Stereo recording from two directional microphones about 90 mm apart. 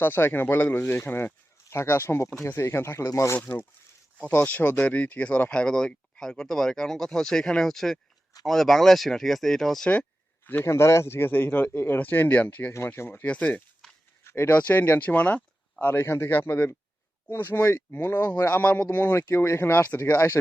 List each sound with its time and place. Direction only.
0.0 s a man's voice: 20° left (ahead or behind)
3.3 s a man's voice: 20° left (ahead or behind); by 9.9 s 5° left (ahead or behind)
10.4 s a man's voice: 25° left (ahead or behind)
12.7 s a man's voice: 30° left (ahead or behind)
13.8 s a sound: 5° left (ahead or behind)
14.3 s speech: 25° left (ahead or behind)
14.5 s a man's voice: 15° left (ahead or behind)